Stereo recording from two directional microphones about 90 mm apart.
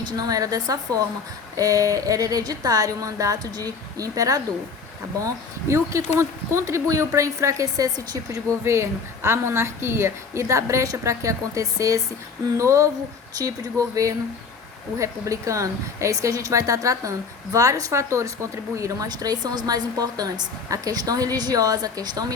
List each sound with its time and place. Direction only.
0.0 s a woman's voice: 40° right (ahead or behind)
8.6 s a woman's voice: 30° right (ahead or behind)
19.0 s a woman's voice: 50° right (ahead or behind)